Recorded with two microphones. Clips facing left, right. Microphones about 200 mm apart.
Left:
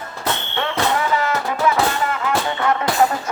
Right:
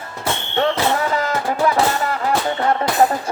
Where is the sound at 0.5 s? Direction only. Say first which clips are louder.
Right 4 dB; 40° right (ahead or behind).